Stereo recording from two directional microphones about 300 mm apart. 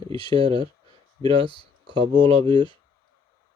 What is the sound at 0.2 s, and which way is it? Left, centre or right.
Speech, centre.